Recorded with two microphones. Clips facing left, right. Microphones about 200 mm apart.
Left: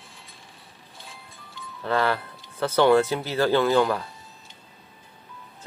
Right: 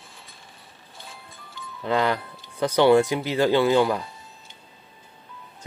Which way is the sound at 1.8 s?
15° right (ahead or behind).